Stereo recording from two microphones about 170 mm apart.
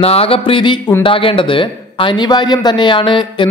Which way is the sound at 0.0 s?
35° left (ahead or behind).